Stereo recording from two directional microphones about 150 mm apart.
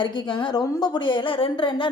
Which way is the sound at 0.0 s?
30° left (ahead or behind).